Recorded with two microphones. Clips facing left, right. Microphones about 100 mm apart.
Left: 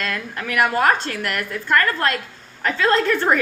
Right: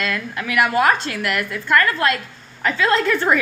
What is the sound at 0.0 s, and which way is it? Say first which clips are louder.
A woman's voice: right 2 dB; 40° left (ahead or behind).